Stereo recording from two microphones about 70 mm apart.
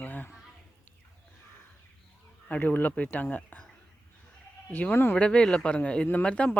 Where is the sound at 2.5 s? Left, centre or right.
Left.